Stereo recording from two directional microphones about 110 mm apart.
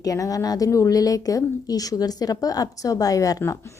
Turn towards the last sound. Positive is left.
turn(degrees=30)  # may be behind; listen again after turning